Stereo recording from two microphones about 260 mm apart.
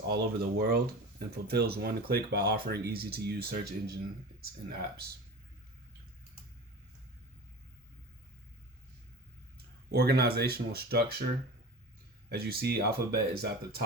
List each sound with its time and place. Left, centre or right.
0.1 s speech: right
9.9 s speech: right
12.3 s speech: right